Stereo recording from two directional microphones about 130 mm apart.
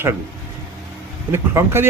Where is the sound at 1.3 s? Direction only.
20° right (ahead or behind).